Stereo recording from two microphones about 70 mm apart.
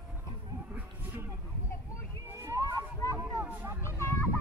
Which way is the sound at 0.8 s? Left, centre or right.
Right.